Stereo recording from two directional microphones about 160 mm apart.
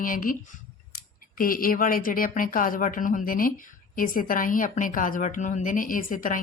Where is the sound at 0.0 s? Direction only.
60° left (ahead or behind).